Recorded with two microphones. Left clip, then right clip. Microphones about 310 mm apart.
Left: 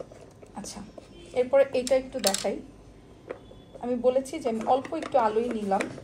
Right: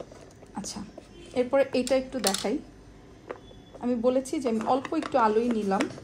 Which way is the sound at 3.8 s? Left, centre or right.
Right.